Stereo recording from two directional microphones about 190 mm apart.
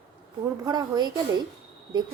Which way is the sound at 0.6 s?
20° right (ahead or behind).